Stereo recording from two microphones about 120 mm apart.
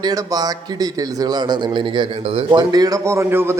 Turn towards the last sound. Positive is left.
turn(degrees=-20)  # may be behind; listen again after turning